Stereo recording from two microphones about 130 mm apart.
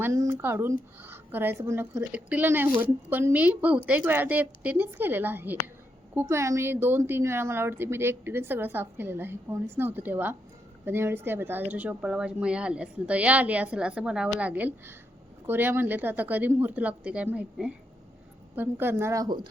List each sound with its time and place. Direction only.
0.0 s speech: 20° right (ahead or behind)